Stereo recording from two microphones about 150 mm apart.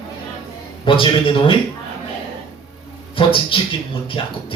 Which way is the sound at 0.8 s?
35° left (ahead or behind).